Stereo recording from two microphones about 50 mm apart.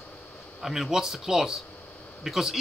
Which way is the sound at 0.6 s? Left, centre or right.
Centre.